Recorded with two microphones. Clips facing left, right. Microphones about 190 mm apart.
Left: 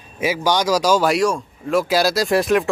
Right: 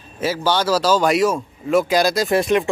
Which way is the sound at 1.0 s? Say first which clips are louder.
Right 1 dB; centre (ahead or behind).